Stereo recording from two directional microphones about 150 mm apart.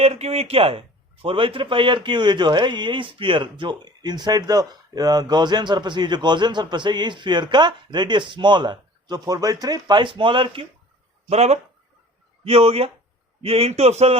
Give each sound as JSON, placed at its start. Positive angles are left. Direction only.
{"t": 0.0, "sound": "a man's voice", "side_deg": -40}
{"t": 11.3, "sound": "a man's voice", "side_deg": -45}